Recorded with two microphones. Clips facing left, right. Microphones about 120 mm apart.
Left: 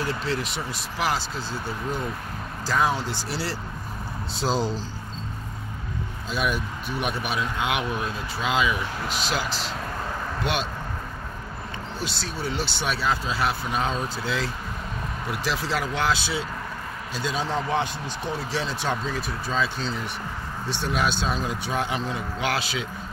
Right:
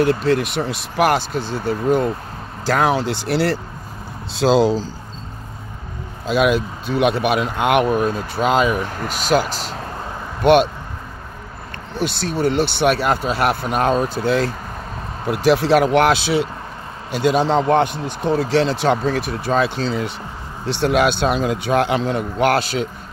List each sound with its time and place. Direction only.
0.0 s speech: 60° right (ahead or behind)
4.4 s speech: 90° right
6.2 s speech: 80° right; by 10.7 s 60° right (ahead or behind)
12.0 s speech: 60° right (ahead or behind)
18.6 s speech: 85° right; by 19.8 s 65° right (ahead or behind)
20.6 s speech: 80° right
22.4 s speech: 50° right (ahead or behind)